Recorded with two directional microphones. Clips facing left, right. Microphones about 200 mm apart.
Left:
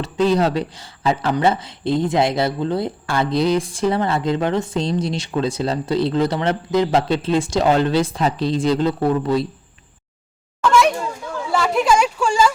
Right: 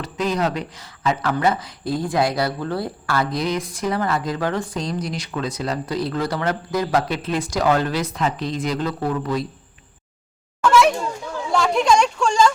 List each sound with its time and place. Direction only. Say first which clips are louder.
0.0 s speech: left 5 dB; 30° left (ahead or behind)
10.6 s a sound: even; centre (ahead or behind)
11.5 s speech: even; 5° left (ahead or behind)